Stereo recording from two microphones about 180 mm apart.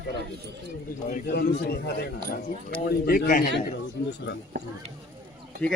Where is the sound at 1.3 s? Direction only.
65° left (ahead or behind).